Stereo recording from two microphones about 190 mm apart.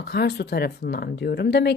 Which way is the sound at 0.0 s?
60° left (ahead or behind).